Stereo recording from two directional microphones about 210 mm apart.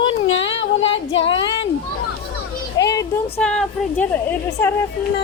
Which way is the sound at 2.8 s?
15° left (ahead or behind).